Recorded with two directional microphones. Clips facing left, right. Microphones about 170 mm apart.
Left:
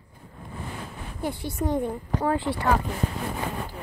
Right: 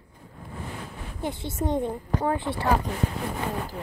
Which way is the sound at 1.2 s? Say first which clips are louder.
Left 1 dB; 20° right (ahead or behind).